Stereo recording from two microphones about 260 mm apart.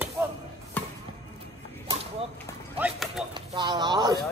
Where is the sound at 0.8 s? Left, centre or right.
Centre.